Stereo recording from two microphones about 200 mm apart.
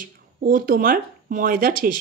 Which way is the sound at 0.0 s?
45° right (ahead or behind).